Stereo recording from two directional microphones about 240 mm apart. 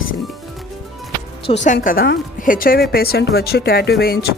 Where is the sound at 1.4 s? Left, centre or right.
Left.